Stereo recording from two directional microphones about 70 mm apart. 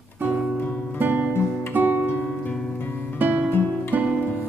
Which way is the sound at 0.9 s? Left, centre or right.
Right.